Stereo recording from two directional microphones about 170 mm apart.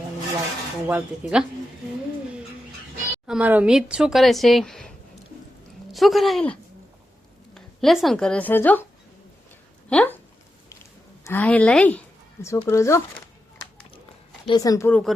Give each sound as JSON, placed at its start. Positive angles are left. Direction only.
{"t": 0.9, "sound": "speech", "side_deg": -5}
{"t": 3.2, "sound": "speech", "side_deg": -5}
{"t": 5.9, "sound": "speech", "side_deg": 0}
{"t": 9.9, "sound": "speech", "side_deg": 5}
{"t": 11.2, "sound": "speech", "side_deg": 10}
{"t": 14.4, "sound": "speech", "side_deg": 25}